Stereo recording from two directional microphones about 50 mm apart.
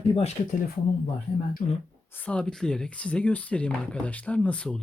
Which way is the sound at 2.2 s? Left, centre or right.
Left.